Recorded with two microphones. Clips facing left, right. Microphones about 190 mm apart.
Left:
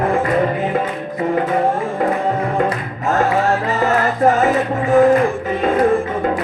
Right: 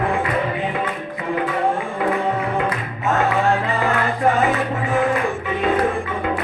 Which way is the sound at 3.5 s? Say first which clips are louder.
Left 3 dB; 40° left (ahead or behind).